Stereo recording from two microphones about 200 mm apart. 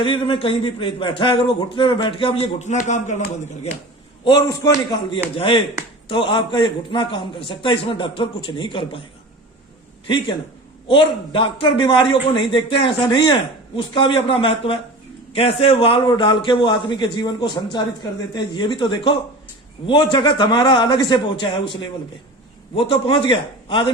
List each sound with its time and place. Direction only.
0.0 s a man's voice: 25° left (ahead or behind)
4.2 s a man's voice: 20° left (ahead or behind)
10.8 s a man's voice: 25° left (ahead or behind)
22.7 s a man's voice: 25° left (ahead or behind)